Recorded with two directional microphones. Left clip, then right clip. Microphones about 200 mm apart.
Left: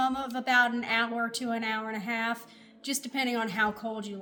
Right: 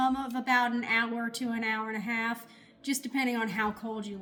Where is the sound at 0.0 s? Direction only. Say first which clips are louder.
Even; 25° left (ahead or behind).